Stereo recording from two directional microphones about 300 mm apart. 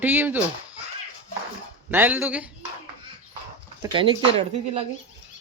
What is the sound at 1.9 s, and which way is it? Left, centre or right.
Speech, centre.